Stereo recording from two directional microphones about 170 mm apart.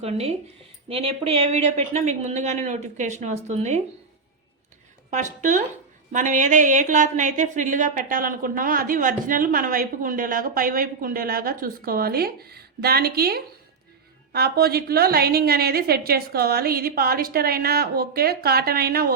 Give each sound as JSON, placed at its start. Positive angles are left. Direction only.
{"t": 0.0, "sound": "a woman's voice", "side_deg": -35}
{"t": 5.1, "sound": "a woman's voice", "side_deg": -45}